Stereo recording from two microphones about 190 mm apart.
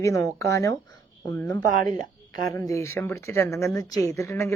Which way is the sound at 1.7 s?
45° right (ahead or behind).